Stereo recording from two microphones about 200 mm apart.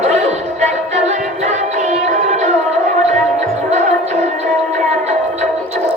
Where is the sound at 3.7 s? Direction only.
35° right (ahead or behind).